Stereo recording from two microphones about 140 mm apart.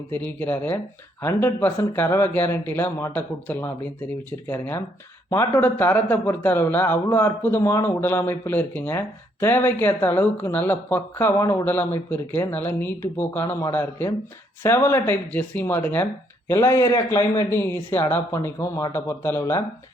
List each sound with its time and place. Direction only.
0.3 s a man's voice: 15° left (ahead or behind)
5.6 s a man's voice: 10° left (ahead or behind)